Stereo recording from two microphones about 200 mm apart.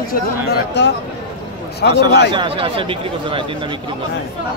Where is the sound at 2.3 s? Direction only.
25° right (ahead or behind).